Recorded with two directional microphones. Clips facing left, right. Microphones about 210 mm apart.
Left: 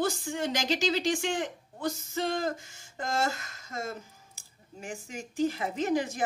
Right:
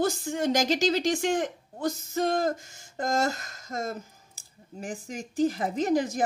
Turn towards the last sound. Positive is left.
turn(degrees=-40)  # may be behind; listen again after turning